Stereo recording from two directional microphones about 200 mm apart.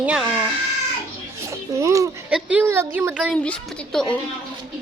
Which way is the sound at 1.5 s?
15° right (ahead or behind).